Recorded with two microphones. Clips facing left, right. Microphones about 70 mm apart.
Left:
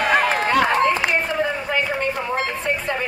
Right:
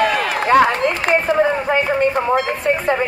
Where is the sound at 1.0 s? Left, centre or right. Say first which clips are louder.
Right 6 dB; right.